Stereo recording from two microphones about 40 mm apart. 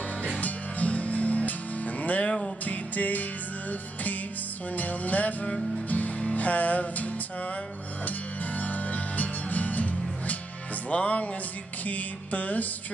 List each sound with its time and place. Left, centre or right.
0.2 s music: left
2.2 s music: centre
2.6 s music: left
4.7 s music: left
8.5 s music: left
11.8 s mantra: left